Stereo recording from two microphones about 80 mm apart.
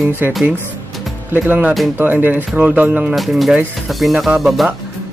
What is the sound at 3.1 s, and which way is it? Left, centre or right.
Speech, centre.